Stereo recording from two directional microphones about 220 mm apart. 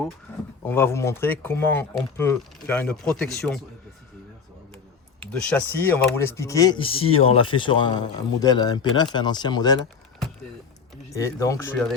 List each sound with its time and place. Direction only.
0.3 s speech: 10° left (ahead or behind)
5.5 s speech: 10° left (ahead or behind)
11.1 s speech: 15° left (ahead or behind)